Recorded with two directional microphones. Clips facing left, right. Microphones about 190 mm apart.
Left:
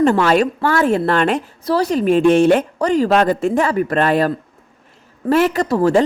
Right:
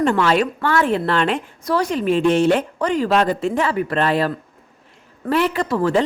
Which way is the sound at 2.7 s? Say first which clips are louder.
Left 3 dB; 40° left (ahead or behind).